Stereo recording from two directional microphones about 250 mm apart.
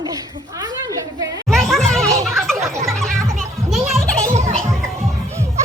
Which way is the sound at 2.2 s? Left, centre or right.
Centre.